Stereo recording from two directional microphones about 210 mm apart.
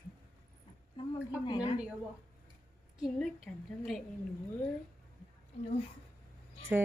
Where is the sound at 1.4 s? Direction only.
20° left (ahead or behind).